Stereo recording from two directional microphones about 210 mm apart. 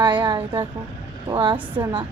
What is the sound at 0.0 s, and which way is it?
A woman's voice, 20° right (ahead or behind).